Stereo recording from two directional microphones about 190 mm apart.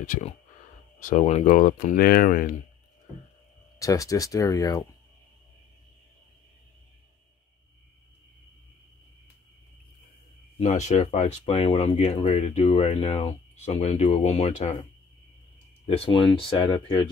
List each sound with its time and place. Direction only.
0.9 s speech: 40° left (ahead or behind)
3.8 s speech: 15° left (ahead or behind)
10.6 s speech: 35° left (ahead or behind)
16.0 s speech: 25° left (ahead or behind)